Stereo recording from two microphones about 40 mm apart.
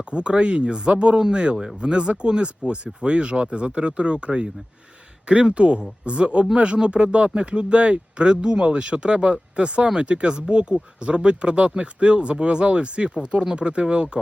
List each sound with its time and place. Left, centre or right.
0.1 s speech: right